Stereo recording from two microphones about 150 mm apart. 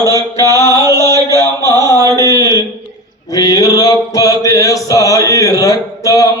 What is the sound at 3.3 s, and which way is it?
Mantra, 25° left (ahead or behind).